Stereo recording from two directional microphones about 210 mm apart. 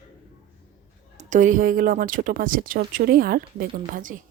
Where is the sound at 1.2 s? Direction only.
35° right (ahead or behind).